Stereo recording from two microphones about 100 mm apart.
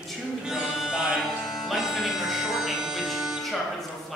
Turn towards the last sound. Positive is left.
turn(degrees=0)  # may be behind; listen again after turning